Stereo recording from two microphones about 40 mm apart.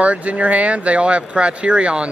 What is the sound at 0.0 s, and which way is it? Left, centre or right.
Speech, right.